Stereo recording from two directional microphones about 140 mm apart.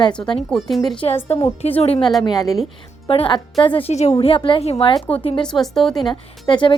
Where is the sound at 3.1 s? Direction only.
35° left (ahead or behind).